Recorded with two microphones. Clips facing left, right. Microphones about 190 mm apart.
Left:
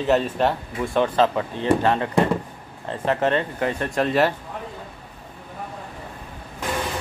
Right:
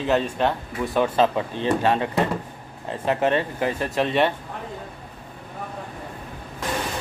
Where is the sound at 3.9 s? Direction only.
Centre (ahead or behind).